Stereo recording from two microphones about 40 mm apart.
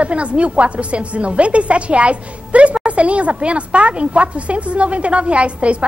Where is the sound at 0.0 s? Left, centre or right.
Right.